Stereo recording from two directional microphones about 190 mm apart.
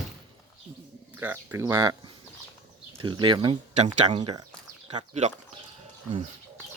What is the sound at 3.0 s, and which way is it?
Speech, 25° right (ahead or behind).